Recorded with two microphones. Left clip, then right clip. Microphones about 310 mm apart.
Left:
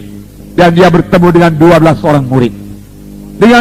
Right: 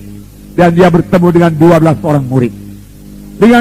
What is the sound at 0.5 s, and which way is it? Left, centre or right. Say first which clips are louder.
A man's voice: left 2 dB; left.